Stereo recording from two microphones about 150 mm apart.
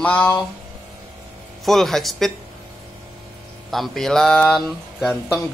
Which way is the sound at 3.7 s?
Centre (ahead or behind).